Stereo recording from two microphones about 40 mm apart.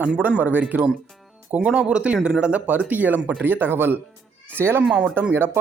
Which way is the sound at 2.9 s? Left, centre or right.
Right.